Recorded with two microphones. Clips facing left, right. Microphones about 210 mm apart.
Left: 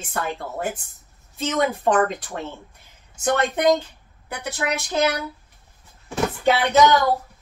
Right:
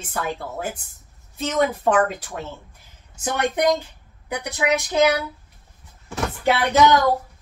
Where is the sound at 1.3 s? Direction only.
5° right (ahead or behind).